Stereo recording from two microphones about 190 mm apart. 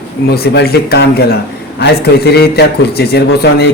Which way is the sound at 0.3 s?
60° left (ahead or behind).